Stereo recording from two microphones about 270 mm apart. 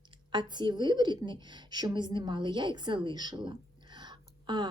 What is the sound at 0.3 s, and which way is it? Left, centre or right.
A woman's voice, centre.